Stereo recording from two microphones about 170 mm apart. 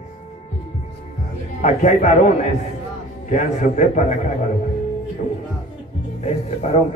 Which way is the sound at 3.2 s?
50° left (ahead or behind).